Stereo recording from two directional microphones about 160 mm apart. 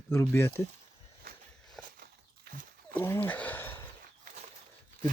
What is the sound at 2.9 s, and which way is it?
Speech, 15° left (ahead or behind).